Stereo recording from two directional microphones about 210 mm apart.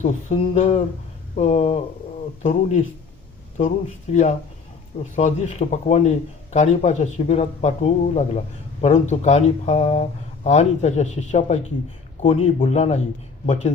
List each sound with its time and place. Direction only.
0.0 s a man's voice: 35° left (ahead or behind)
4.1 s a man's voice: 35° left (ahead or behind)